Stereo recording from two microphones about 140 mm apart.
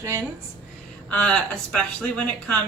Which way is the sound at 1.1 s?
5° left (ahead or behind).